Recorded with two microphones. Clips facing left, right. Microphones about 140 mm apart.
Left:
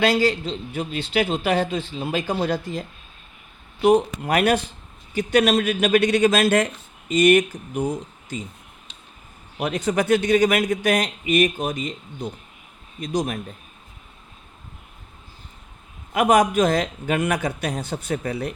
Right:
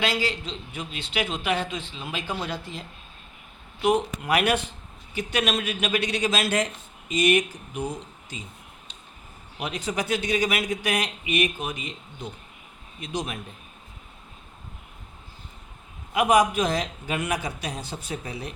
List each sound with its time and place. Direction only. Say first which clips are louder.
0.0 s a man's voice: left 8 dB; 40° left (ahead or behind)
9.6 s a man's voice: left 7 dB; 50° left (ahead or behind)
13.0 s a man's voice: left 7 dB; 40° left (ahead or behind)
16.1 s a man's voice: left 3 dB; 50° left (ahead or behind)